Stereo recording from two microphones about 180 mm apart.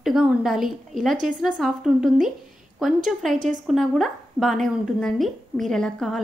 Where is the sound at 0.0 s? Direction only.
5° right (ahead or behind).